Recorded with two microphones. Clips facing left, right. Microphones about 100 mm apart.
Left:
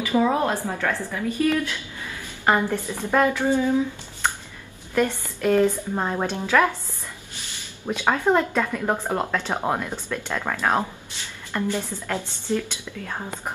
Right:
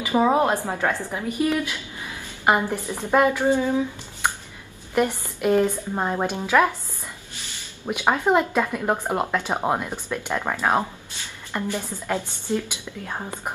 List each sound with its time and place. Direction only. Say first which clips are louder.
0.0 s speech: right 2 dB; 20° right (ahead or behind)
7.8 s speech: even; 15° right (ahead or behind)